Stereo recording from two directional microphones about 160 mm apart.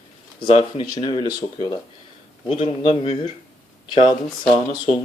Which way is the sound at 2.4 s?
35° left (ahead or behind).